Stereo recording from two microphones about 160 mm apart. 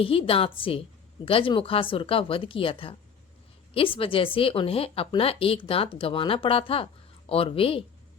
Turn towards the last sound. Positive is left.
turn(degrees=35)  # may be behind; listen again after turning